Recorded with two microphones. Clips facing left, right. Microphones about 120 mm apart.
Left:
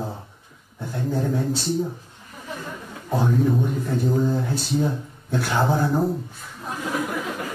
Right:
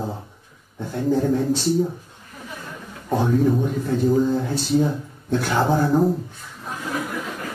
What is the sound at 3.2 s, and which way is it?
A man's voice, centre (ahead or behind).